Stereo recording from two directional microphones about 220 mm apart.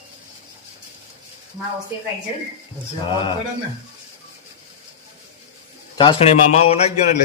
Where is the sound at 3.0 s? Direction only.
20° left (ahead or behind).